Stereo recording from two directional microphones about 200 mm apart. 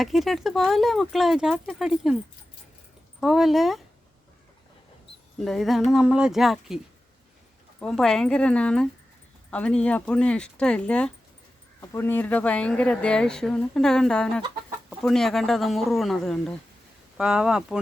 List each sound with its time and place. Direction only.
0.0 s speech: centre (ahead or behind)
3.2 s speech: centre (ahead or behind)
5.4 s speech: centre (ahead or behind)
7.8 s speech: 5° left (ahead or behind)